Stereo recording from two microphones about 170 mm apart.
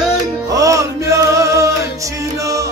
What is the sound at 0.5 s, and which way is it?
Music, 20° right (ahead or behind).